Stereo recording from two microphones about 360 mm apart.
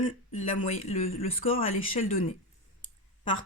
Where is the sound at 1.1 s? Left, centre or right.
Left.